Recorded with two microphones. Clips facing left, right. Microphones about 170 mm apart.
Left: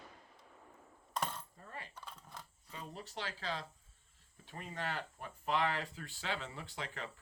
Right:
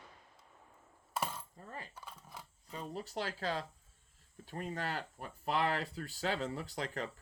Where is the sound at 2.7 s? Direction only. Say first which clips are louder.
Right 6 dB; 40° right (ahead or behind).